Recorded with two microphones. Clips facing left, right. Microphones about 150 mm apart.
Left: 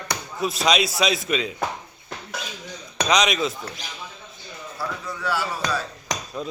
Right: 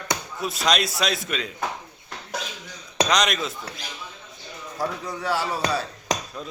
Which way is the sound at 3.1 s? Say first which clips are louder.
Left 5 dB; centre (ahead or behind).